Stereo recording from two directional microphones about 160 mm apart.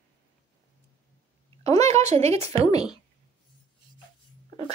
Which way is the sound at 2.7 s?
25° left (ahead or behind).